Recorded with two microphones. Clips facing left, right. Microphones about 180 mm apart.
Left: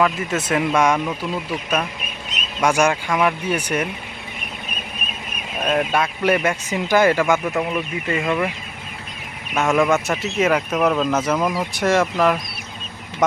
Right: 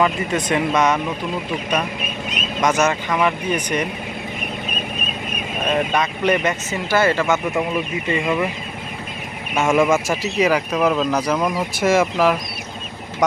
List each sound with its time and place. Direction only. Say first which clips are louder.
0.0 s speech: right 1 dB; centre (ahead or behind)
2.6 s speech: left 1 dB; 10° left (ahead or behind)
5.6 s speech: even; 5° left (ahead or behind)
9.6 s speech: right 1 dB; centre (ahead or behind)